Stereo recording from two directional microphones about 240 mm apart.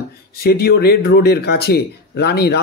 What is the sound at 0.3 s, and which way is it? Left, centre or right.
Speech, left.